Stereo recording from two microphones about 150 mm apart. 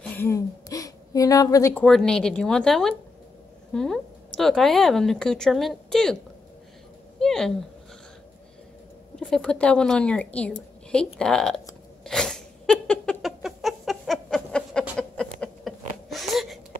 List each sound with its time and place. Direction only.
0.2 s a woman's voice: 20° left (ahead or behind)
1.9 s speech: 5° left (ahead or behind)
7.2 s speech: 5° left (ahead or behind)
9.1 s a woman's voice: 5° left (ahead or behind)
12.0 s cat: 5° left (ahead or behind)
15.7 s a sound: centre (ahead or behind)